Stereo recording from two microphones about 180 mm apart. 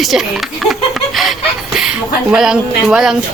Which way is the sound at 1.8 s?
5° right (ahead or behind).